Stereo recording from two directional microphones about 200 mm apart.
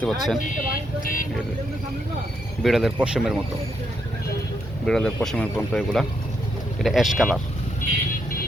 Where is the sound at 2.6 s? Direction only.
Centre (ahead or behind).